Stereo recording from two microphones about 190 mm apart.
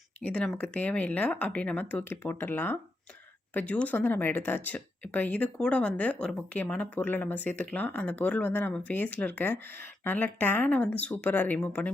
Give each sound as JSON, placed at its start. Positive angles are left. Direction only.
{"t": 0.2, "sound": "speech", "side_deg": 5}